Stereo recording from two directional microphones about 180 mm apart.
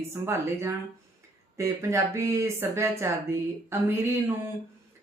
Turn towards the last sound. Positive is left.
turn(degrees=-15)  # may be behind; listen again after turning